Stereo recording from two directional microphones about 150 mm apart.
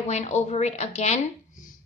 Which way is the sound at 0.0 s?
45° left (ahead or behind).